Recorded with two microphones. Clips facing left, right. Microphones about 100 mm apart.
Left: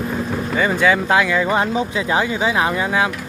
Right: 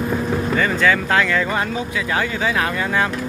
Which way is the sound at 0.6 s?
15° left (ahead or behind).